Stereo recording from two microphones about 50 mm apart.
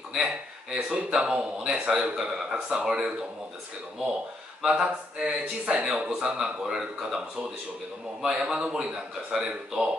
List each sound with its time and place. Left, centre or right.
0.1 s speech: centre
4.6 s speech: centre
8.2 s speech: centre